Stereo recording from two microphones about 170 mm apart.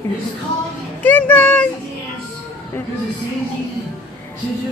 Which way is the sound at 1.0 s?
10° left (ahead or behind).